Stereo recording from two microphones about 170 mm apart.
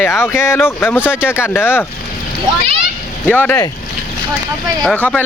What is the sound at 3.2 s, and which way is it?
Speech, 10° left (ahead or behind).